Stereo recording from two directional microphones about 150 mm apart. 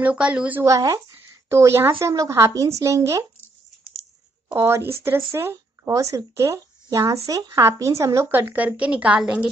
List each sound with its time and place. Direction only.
0.0 s a woman's voice: 10° right (ahead or behind)
0.7 s speech: 20° right (ahead or behind)
4.5 s a woman's voice: 15° right (ahead or behind)